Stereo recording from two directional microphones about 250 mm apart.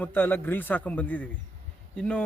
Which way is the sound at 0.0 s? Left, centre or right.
Centre.